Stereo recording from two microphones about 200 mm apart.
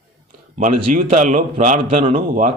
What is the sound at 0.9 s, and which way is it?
Speech, 40° right (ahead or behind).